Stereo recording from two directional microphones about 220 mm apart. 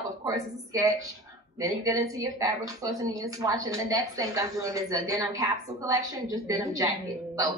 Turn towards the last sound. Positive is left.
turn(degrees=-15)  # may be behind; listen again after turning